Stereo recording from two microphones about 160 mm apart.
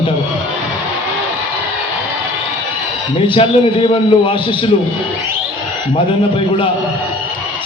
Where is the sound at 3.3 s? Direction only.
35° left (ahead or behind).